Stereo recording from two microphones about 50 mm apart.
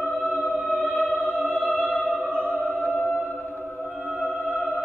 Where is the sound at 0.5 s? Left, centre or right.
Centre.